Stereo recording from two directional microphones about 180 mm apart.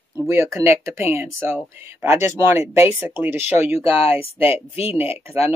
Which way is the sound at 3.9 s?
30° left (ahead or behind).